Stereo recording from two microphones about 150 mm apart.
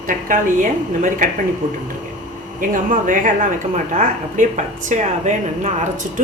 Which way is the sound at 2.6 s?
60° right (ahead or behind).